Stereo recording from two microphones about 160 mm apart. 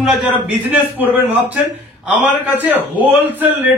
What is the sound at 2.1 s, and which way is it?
Speech, 10° right (ahead or behind).